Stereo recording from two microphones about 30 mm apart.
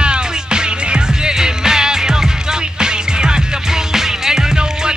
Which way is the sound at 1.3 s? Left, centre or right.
Centre.